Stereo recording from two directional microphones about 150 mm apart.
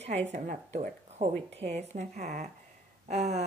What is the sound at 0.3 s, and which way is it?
Speech, 50° right (ahead or behind).